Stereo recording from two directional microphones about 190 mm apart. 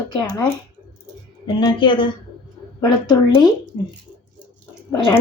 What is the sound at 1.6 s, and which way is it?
Speech, 25° left (ahead or behind).